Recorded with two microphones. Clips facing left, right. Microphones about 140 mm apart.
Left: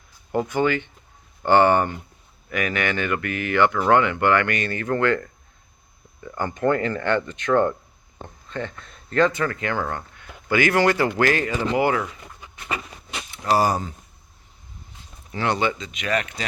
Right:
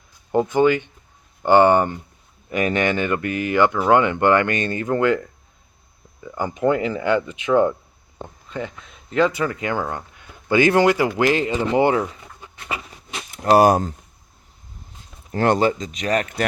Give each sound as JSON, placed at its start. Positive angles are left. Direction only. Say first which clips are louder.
{"t": 0.3, "sound": "speech", "louder": "right 5 dB", "side_deg": -25}
{"t": 13.5, "sound": "speech", "louder": "right 6 dB", "side_deg": -60}
{"t": 15.3, "sound": "speech", "louder": "right 5 dB", "side_deg": -45}